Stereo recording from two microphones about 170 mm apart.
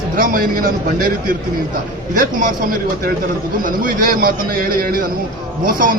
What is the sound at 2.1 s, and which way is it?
Speech, 55° right (ahead or behind).